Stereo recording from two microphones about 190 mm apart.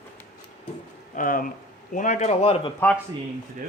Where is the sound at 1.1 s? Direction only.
45° left (ahead or behind); by 2.7 s 30° left (ahead or behind).